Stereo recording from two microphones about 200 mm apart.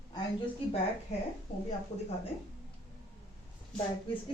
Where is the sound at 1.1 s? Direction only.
35° left (ahead or behind).